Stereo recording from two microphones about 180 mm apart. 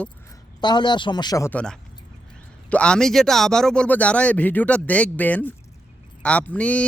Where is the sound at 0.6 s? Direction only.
25° left (ahead or behind).